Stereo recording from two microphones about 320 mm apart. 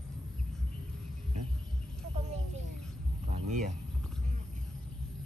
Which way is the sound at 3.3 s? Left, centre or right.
Right.